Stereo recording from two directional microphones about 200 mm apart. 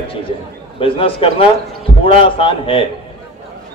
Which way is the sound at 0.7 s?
25° left (ahead or behind).